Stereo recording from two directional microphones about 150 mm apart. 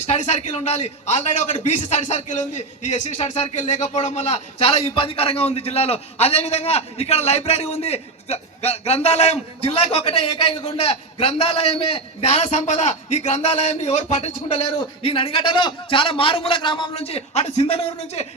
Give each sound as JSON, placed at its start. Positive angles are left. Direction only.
{"t": 0.0, "sound": "speech", "side_deg": 50}
{"t": 14.4, "sound": "a man's voice", "side_deg": 35}